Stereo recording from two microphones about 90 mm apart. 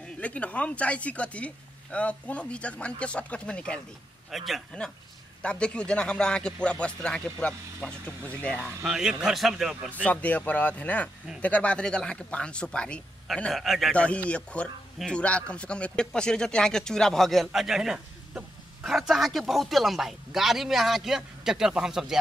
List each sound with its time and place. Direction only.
0.0 s speech: 15° left (ahead or behind)
4.3 s a man's voice: centre (ahead or behind)
5.4 s speech: 10° left (ahead or behind)
8.8 s a man's voice: 5° right (ahead or behind)
10.0 s speech: 15° left (ahead or behind)
13.5 s a man's voice: centre (ahead or behind)
13.9 s a man's voice: 15° left (ahead or behind); by 22.2 s 5° right (ahead or behind)